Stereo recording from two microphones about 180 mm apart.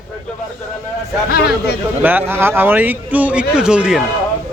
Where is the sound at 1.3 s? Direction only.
60° left (ahead or behind).